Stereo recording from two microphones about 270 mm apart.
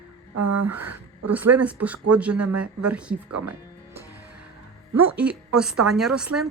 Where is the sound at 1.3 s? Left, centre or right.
Centre.